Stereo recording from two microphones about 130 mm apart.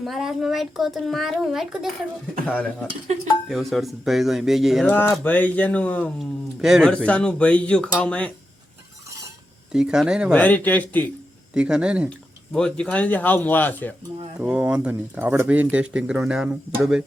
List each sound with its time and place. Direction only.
0.0 s a child's voice: centre (ahead or behind)
3.1 s dishes: 60° right (ahead or behind)
3.5 s a child's voice: centre (ahead or behind)
4.9 s speech: 15° left (ahead or behind)
6.6 s speech: 5° right (ahead or behind)
9.7 s a child's voice: 5° right (ahead or behind)
10.3 s speech: 15° left (ahead or behind)
11.5 s speech: 10° right (ahead or behind)
12.5 s speech: 5° left (ahead or behind)
14.3 s speech: 5° right (ahead or behind)